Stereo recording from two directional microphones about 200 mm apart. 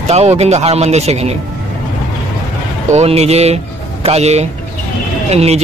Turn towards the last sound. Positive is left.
turn(degrees=-30)  # may be behind; listen again after turning